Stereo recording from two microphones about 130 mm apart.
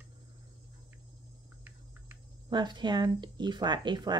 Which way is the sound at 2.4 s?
35° right (ahead or behind).